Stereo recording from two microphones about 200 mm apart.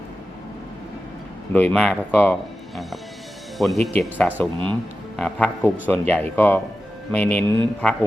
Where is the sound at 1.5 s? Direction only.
5° left (ahead or behind).